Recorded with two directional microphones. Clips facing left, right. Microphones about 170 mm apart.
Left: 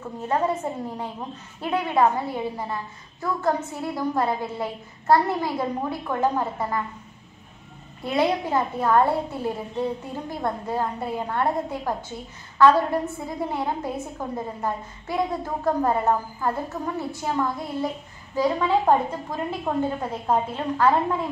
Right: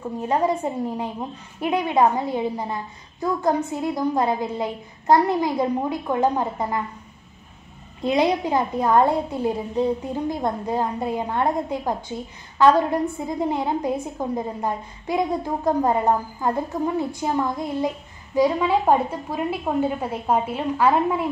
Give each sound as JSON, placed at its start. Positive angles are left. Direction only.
{"t": 0.2, "sound": "a woman's voice", "side_deg": -15}
{"t": 8.0, "sound": "a woman's voice", "side_deg": -15}